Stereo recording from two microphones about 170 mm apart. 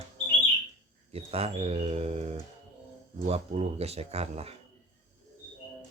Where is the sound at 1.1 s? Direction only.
35° right (ahead or behind).